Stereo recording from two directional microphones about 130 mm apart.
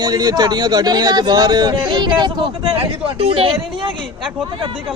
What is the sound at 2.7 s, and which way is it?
Speech, 50° right (ahead or behind).